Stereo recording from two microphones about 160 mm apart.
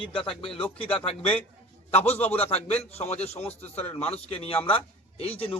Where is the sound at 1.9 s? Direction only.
40° left (ahead or behind).